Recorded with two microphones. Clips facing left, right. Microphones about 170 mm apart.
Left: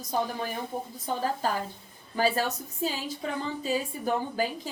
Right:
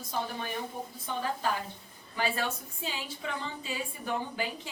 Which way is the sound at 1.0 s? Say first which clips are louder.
Left 4 dB; 40° left (ahead or behind).